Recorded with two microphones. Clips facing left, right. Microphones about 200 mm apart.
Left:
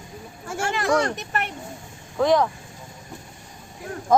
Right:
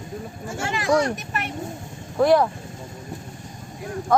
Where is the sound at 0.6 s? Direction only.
55° left (ahead or behind).